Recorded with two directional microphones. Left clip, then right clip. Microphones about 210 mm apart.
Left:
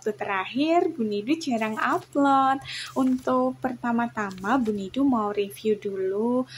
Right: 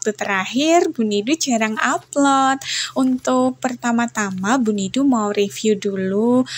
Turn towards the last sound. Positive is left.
turn(degrees=-30)  # may be behind; listen again after turning